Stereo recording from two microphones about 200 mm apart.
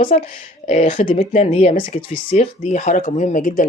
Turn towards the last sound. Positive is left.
turn(degrees=40)  # may be behind; listen again after turning